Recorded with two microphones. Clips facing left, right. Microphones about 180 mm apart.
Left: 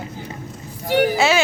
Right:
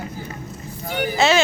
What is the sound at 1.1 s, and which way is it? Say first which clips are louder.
Speech: even; 10° left (ahead or behind).